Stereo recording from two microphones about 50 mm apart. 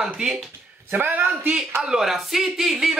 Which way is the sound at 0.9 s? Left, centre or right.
Right.